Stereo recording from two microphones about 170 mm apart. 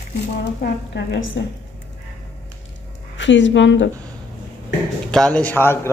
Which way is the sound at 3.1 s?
90° left.